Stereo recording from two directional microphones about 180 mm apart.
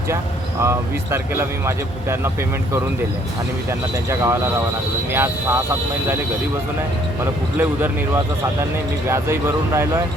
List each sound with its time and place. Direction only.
0.6 s speech: 15° right (ahead or behind)
3.7 s speech: 15° right (ahead or behind)
7.6 s speech: 15° right (ahead or behind)